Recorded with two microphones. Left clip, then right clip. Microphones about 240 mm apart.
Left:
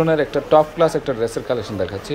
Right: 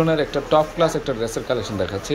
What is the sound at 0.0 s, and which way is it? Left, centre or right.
Speech, centre.